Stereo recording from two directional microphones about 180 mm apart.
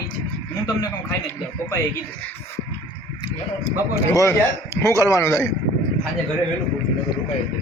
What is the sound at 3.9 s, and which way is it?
A man's voice, 15° left (ahead or behind).